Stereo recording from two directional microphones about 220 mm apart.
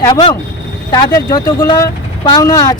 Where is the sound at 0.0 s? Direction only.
20° left (ahead or behind).